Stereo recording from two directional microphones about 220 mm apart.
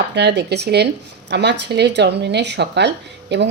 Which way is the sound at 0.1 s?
50° right (ahead or behind).